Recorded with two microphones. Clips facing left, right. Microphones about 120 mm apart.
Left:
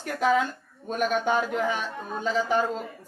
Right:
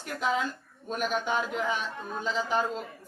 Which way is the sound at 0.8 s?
50° left (ahead or behind).